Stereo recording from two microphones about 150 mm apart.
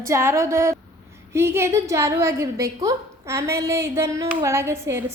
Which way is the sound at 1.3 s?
15° right (ahead or behind).